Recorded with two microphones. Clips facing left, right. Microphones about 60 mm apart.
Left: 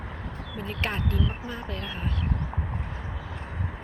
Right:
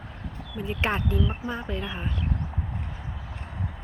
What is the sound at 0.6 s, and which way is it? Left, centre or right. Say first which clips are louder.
A woman's voice: right 4 dB; centre.